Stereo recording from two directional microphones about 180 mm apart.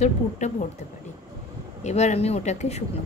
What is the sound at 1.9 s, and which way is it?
Speech, 40° left (ahead or behind).